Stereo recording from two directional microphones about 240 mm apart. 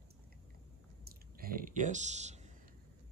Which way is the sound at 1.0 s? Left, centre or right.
Right.